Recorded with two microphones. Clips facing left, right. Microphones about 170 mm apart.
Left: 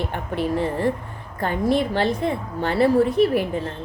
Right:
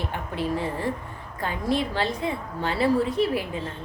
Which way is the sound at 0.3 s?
60° left (ahead or behind).